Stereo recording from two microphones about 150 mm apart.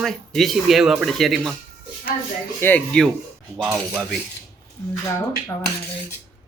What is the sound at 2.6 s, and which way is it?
Speech, 10° left (ahead or behind).